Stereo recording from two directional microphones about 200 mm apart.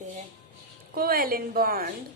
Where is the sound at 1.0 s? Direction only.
45° right (ahead or behind).